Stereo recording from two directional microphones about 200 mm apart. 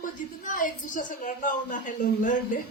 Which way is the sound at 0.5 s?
40° left (ahead or behind).